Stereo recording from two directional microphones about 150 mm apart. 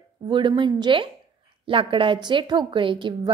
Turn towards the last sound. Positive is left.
turn(degrees=-30)  # may be behind; listen again after turning